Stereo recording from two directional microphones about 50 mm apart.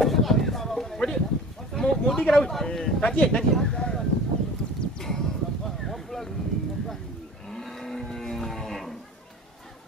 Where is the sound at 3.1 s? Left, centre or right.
Centre.